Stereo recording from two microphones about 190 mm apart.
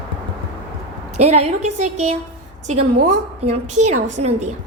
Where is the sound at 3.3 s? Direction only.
35° right (ahead or behind).